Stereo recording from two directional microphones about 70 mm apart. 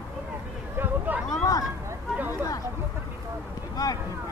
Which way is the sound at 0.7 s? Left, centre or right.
Right.